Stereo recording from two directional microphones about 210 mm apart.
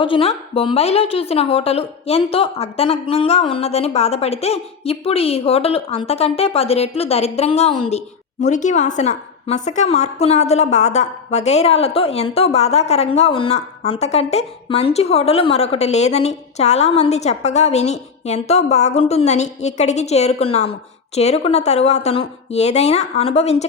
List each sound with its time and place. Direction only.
0.0 s a woman's voice: 25° left (ahead or behind)